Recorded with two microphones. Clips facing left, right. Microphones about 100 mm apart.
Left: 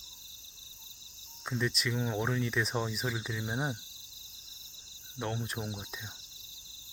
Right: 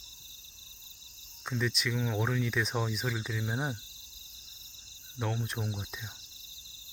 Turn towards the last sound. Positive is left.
turn(degrees=0)  # may be behind; listen again after turning